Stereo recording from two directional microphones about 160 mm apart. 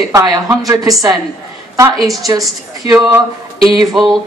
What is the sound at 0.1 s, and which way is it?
Speech, 20° right (ahead or behind).